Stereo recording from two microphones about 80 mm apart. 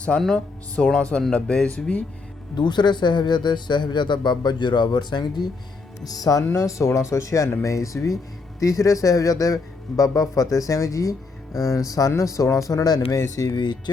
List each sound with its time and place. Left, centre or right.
0.3 s speech: centre
2.6 s speech: left
6.1 s a man's voice: left
13.6 s speech: left